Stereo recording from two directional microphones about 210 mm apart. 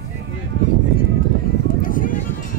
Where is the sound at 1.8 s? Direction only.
40° left (ahead or behind).